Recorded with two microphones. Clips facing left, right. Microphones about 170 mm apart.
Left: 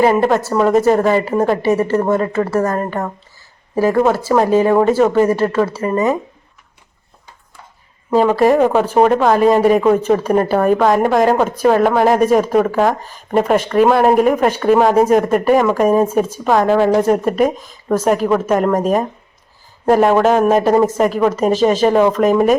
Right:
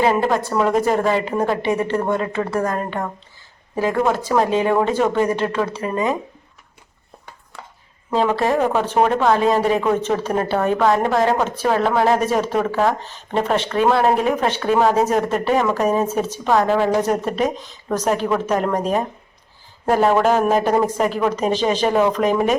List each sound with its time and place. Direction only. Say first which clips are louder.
0.0 s speech: left 5 dB; 5° left (ahead or behind)
7.6 s a sound: right 4 dB; 85° right
8.1 s speech: left 6 dB; 10° left (ahead or behind)